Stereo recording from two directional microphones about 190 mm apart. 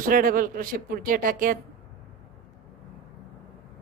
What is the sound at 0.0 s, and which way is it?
A woman's voice, 45° right (ahead or behind).